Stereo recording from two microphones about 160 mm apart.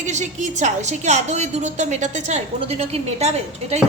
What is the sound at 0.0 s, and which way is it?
A woman's voice, 50° right (ahead or behind).